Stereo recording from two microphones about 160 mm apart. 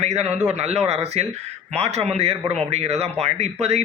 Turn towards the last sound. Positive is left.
turn(degrees=-40)  # may be behind; listen again after turning